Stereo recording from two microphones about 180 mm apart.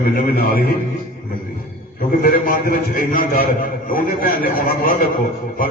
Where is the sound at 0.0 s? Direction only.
55° left (ahead or behind).